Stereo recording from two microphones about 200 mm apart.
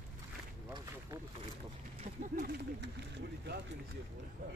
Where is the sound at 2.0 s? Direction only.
45° right (ahead or behind).